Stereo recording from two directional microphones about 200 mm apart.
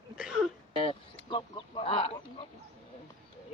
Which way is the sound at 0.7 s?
25° left (ahead or behind).